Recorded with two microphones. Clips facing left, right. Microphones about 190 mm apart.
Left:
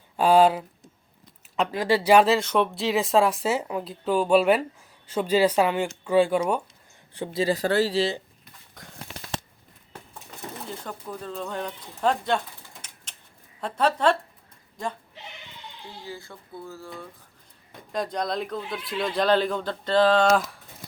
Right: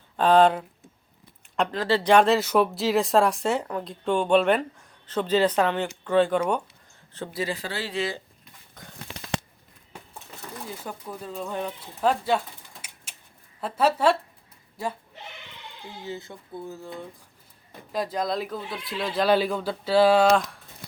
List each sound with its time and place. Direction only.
0.2 s speech: 10° left (ahead or behind)
7.3 s speech: 35° left (ahead or behind)
10.7 s speech: 10° right (ahead or behind)
12.8 s a sound: 10° right (ahead or behind)
13.6 s speech: 5° right (ahead or behind)
16.0 s speech: 20° right (ahead or behind)
17.9 s speech: 5° right (ahead or behind)
20.2 s speech: centre (ahead or behind)